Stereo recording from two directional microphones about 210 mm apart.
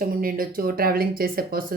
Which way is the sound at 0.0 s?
40° right (ahead or behind).